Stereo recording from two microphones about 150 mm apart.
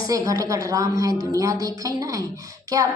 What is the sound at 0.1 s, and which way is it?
A woman's voice, 20° right (ahead or behind).